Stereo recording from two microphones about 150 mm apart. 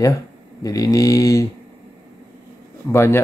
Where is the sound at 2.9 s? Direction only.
15° left (ahead or behind).